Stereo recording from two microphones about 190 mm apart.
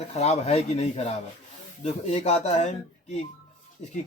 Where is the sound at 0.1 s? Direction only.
35° left (ahead or behind).